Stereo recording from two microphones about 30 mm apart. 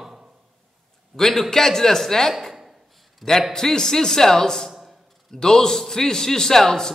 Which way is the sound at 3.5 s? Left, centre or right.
Centre.